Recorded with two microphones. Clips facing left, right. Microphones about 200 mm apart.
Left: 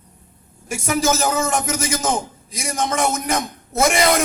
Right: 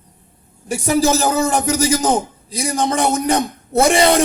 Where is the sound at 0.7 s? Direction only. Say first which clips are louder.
Right 4 dB; 35° right (ahead or behind).